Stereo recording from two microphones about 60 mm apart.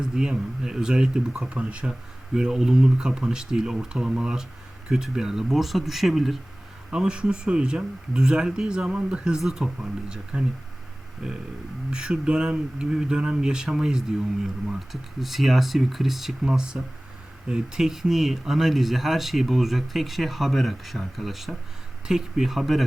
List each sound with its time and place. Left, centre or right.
0.0 s speech: centre
6.9 s speech: centre